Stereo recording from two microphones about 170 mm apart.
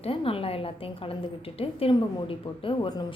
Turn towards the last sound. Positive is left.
turn(degrees=25)  # may be behind; listen again after turning